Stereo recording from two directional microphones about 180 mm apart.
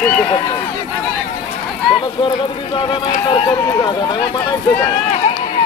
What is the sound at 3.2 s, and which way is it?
Speech, 30° left (ahead or behind).